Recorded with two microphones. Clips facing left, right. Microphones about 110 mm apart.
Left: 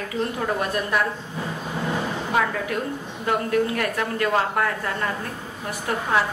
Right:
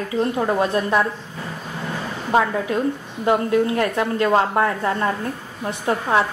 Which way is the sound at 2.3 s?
25° right (ahead or behind).